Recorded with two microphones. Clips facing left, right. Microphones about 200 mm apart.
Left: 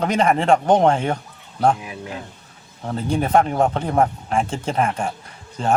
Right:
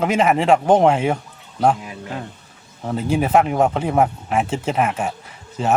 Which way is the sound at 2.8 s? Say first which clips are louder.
Right 2 dB; 5° right (ahead or behind).